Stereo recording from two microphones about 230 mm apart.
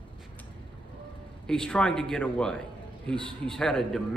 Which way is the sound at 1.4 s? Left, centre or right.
Centre.